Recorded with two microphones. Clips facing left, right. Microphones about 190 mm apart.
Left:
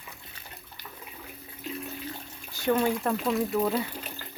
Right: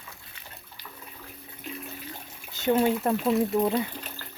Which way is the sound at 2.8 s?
20° right (ahead or behind).